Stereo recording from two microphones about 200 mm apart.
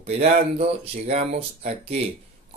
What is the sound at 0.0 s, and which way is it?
Speech, 30° right (ahead or behind).